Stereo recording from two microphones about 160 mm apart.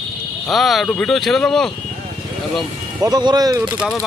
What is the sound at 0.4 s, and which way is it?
Speech, centre (ahead or behind).